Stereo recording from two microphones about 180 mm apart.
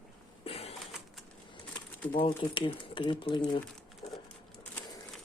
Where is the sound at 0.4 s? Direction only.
35° left (ahead or behind).